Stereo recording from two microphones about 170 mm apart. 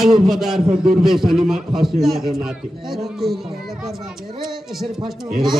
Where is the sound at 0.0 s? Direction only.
Centre (ahead or behind).